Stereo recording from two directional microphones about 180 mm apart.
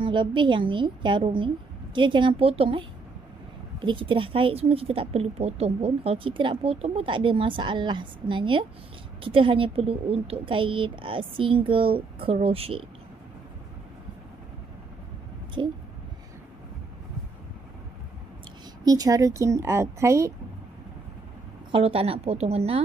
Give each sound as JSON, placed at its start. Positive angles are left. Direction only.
{"t": 0.0, "sound": "a woman's voice", "side_deg": -25}
{"t": 15.6, "sound": "a woman's voice", "side_deg": -25}
{"t": 18.9, "sound": "a woman's voice", "side_deg": -20}
{"t": 21.7, "sound": "speech", "side_deg": -30}